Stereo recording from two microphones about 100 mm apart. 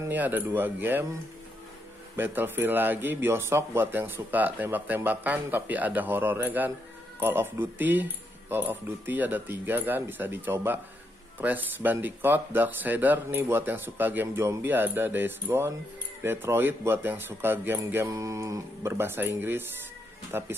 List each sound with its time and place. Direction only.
0.1 s speech: 20° right (ahead or behind)
2.1 s speech: 20° right (ahead or behind)